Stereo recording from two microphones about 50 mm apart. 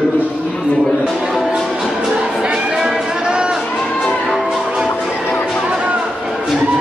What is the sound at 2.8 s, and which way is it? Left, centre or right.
Music, centre.